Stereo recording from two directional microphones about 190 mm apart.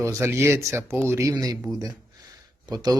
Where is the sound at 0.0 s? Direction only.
15° right (ahead or behind).